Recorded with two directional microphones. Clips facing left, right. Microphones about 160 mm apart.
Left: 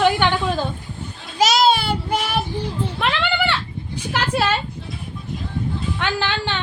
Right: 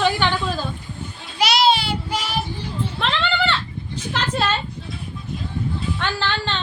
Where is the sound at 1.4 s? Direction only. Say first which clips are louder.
Left 2 dB; 45° left (ahead or behind).